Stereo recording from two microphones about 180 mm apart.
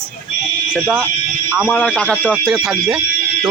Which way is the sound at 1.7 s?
5° left (ahead or behind).